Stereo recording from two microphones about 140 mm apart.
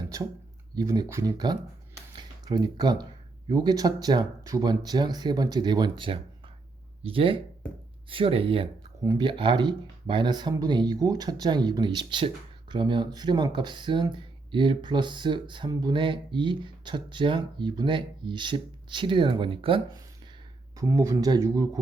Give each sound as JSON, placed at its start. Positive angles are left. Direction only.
{"t": 0.0, "sound": "a sound", "side_deg": -25}
{"t": 0.8, "sound": "speech", "side_deg": -25}
{"t": 20.7, "sound": "speech", "side_deg": -20}